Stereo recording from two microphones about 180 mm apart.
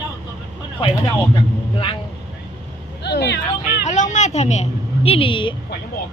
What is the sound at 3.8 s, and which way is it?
A woman's voice, 45° left (ahead or behind).